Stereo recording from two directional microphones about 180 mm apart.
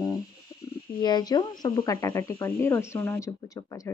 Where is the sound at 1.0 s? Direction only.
25° left (ahead or behind).